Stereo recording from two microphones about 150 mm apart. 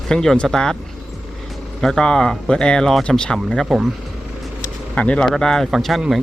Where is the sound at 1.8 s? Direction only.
5° left (ahead or behind).